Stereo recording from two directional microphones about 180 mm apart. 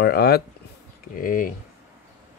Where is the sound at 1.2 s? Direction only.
50° left (ahead or behind).